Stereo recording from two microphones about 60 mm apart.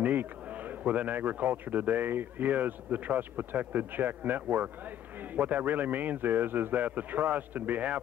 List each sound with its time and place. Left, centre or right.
0.0 s a man's voice: right